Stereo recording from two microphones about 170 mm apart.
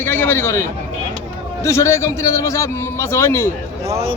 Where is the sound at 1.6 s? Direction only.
15° left (ahead or behind).